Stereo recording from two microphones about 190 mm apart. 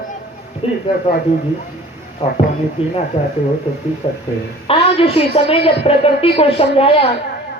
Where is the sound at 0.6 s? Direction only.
30° left (ahead or behind).